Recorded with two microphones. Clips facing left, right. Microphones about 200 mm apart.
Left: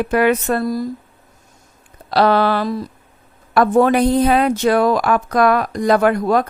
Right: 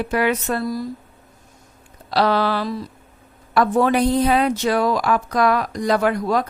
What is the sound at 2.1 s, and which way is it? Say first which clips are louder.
A woman's voice: left 4 dB; 55° left (ahead or behind).